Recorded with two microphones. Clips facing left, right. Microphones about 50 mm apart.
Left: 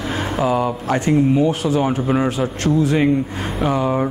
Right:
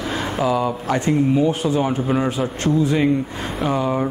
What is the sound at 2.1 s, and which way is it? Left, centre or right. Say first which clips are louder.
Speech: left 2 dB; centre.